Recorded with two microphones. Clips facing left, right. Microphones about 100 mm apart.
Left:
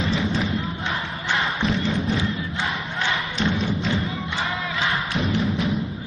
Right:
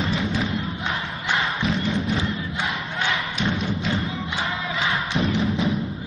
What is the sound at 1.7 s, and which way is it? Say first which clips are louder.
Music: left 1 dB; centre (ahead or behind).